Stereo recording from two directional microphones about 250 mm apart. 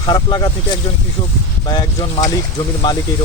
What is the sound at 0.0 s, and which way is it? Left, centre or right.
Speech, centre.